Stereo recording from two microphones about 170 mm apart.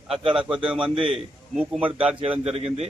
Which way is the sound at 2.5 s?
35° right (ahead or behind).